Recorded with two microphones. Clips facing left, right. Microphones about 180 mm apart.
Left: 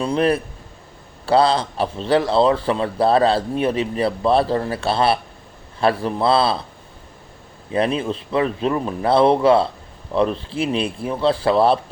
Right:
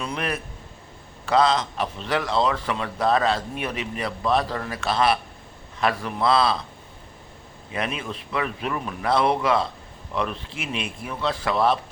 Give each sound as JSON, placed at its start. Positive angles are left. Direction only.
{"t": 0.0, "sound": "a man's voice", "side_deg": 30}
{"t": 7.7, "sound": "a man's voice", "side_deg": 30}